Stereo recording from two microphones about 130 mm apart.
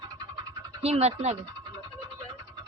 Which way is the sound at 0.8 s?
55° right (ahead or behind).